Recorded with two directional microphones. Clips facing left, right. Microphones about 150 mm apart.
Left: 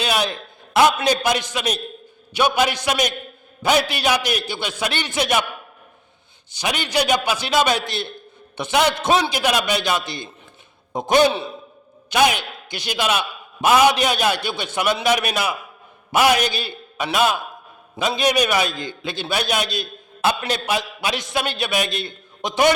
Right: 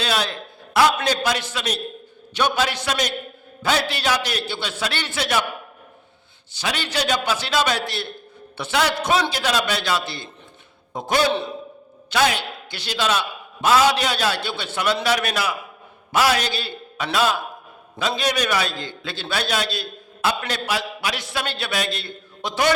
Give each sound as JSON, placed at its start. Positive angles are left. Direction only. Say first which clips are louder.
{"t": 0.0, "sound": "a man's voice", "louder": "left 2 dB", "side_deg": 15}
{"t": 6.5, "sound": "a man's voice", "louder": "left 3 dB", "side_deg": 15}